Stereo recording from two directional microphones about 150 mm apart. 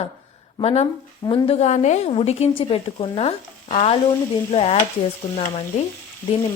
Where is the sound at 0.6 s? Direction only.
40° left (ahead or behind).